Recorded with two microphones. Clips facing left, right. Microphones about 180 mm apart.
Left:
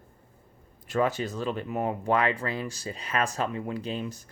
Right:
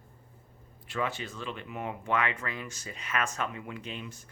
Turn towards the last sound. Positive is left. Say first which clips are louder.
# left 8 dB
turn(degrees=35)  # may be behind; listen again after turning